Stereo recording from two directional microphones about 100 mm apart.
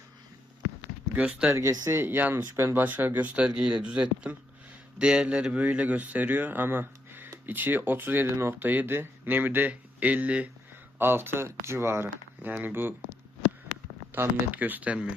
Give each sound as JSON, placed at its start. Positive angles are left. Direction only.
{"t": 1.1, "sound": "speech", "side_deg": -15}
{"t": 14.1, "sound": "speech", "side_deg": -20}